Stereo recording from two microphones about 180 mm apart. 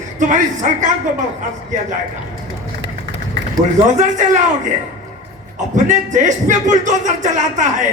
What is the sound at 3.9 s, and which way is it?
Speech, 45° right (ahead or behind).